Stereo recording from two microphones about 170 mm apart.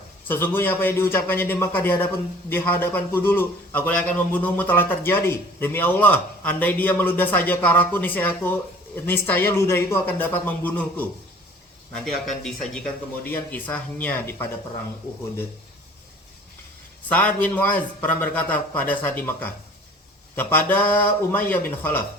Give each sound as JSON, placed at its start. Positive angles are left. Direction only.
{"t": 0.3, "sound": "a man's voice", "side_deg": 15}
{"t": 12.0, "sound": "a man's voice", "side_deg": 0}
{"t": 17.1, "sound": "a man's voice", "side_deg": 10}